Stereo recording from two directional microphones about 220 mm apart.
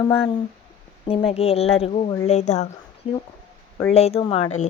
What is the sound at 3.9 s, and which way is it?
Speech, 30° left (ahead or behind).